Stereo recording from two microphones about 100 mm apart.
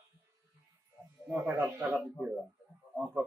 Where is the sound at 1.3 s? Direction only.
10° right (ahead or behind).